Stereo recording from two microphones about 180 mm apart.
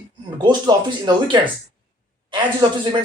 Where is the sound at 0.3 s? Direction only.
25° right (ahead or behind).